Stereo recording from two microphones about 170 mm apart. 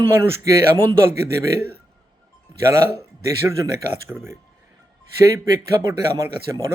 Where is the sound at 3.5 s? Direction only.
15° right (ahead or behind).